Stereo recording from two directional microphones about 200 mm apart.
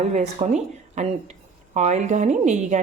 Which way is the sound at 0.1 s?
35° right (ahead or behind).